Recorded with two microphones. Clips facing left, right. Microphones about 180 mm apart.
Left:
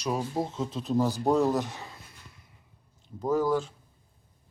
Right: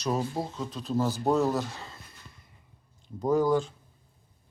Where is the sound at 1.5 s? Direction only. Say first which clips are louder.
Left 1 dB; 20° left (ahead or behind).